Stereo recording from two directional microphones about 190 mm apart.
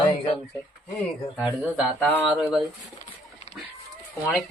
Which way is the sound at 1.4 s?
5° right (ahead or behind).